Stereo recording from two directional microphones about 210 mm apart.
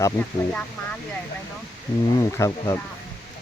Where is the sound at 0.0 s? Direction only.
10° left (ahead or behind).